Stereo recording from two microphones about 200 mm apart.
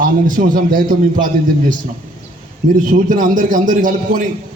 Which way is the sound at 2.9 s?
40° right (ahead or behind).